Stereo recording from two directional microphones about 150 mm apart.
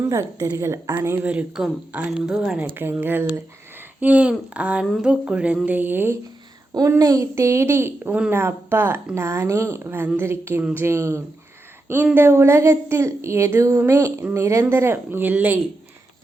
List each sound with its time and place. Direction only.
0.0 s a woman's voice: 20° right (ahead or behind)